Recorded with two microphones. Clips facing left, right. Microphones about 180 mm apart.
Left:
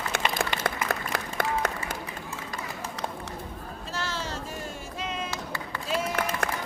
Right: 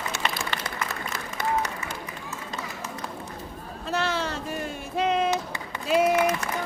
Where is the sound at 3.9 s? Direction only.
60° right (ahead or behind).